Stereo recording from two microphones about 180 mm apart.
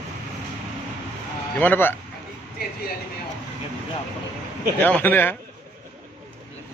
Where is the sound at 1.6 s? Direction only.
10° left (ahead or behind).